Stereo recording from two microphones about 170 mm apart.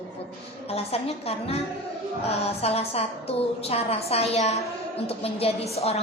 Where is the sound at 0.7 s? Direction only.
35° left (ahead or behind).